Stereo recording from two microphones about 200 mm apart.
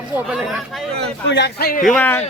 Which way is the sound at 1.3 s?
60° left (ahead or behind).